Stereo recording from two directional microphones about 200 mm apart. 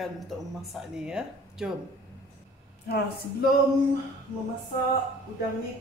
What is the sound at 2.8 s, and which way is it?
Speech, 50° left (ahead or behind).